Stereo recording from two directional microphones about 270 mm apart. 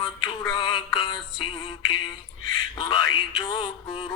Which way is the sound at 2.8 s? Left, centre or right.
Centre.